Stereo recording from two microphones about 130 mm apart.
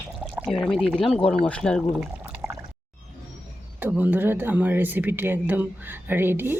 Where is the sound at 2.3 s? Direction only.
20° right (ahead or behind).